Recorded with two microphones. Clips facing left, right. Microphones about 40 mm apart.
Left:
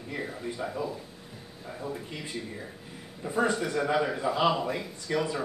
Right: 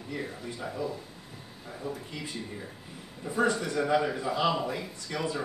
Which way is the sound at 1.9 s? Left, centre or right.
Centre.